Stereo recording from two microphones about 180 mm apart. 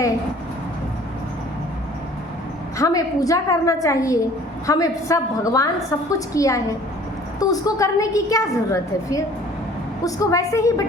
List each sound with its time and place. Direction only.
2.7 s a woman's voice: 20° left (ahead or behind)